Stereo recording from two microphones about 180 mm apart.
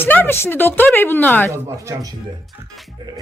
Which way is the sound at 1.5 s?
15° right (ahead or behind).